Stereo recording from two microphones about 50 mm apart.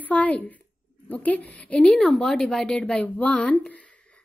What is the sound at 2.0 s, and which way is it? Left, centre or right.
Speech, centre.